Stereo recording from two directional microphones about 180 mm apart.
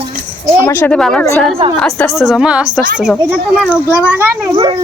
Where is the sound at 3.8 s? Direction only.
15° left (ahead or behind).